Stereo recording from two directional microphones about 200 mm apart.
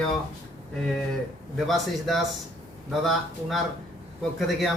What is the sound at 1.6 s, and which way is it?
Speech, centre (ahead or behind).